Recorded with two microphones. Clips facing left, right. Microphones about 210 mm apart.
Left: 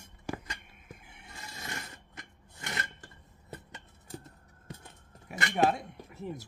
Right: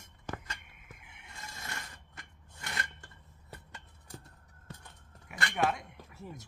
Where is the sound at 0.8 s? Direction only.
35° left (ahead or behind).